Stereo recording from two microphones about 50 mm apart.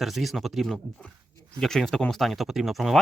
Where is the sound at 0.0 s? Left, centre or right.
Centre.